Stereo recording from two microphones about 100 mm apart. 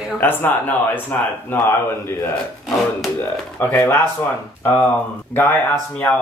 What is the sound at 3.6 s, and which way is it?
Speech, 20° left (ahead or behind).